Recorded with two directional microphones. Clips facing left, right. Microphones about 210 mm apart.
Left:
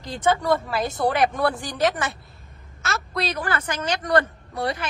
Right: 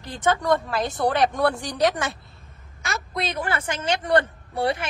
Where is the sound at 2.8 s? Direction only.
20° right (ahead or behind).